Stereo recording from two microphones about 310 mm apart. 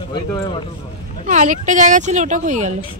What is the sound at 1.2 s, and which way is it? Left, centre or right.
Speech, right.